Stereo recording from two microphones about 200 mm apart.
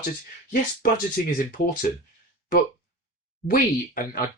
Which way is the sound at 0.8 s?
45° left (ahead or behind).